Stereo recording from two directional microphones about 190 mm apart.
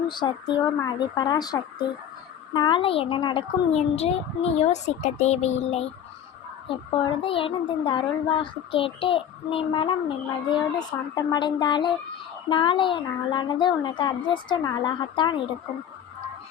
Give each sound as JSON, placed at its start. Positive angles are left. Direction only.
{"t": 0.1, "sound": "a child's voice", "side_deg": 25}